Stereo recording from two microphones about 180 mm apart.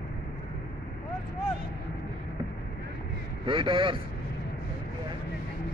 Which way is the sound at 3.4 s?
30° right (ahead or behind).